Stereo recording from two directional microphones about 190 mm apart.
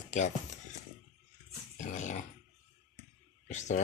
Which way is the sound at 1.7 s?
40° left (ahead or behind).